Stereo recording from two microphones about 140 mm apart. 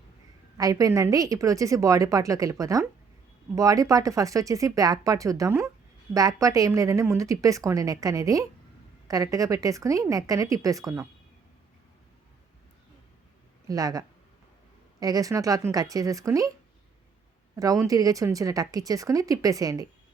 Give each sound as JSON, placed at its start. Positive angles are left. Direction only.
{"t": 0.5, "sound": "a woman's voice", "side_deg": -25}
{"t": 13.7, "sound": "a woman's voice", "side_deg": -25}
{"t": 15.0, "sound": "a woman's voice", "side_deg": -25}
{"t": 17.8, "sound": "a woman's voice", "side_deg": -25}